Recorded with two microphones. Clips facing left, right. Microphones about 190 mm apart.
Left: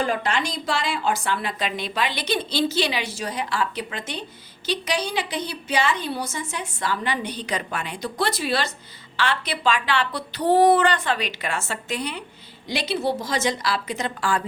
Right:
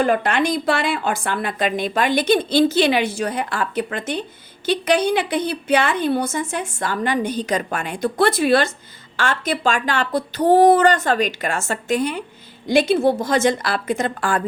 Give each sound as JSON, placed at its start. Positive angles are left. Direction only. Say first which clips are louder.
{"t": 0.0, "sound": "a woman's voice", "louder": "right 6 dB", "side_deg": -55}